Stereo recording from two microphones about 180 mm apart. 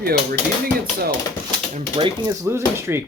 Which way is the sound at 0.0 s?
55° right (ahead or behind).